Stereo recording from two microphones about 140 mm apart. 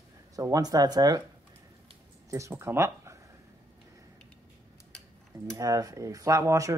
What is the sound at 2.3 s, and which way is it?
Speech, 20° right (ahead or behind).